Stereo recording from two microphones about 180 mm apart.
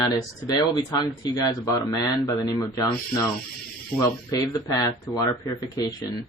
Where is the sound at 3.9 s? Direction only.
20° left (ahead or behind).